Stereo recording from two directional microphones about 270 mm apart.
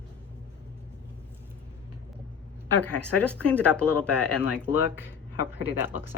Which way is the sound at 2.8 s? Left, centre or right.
Centre.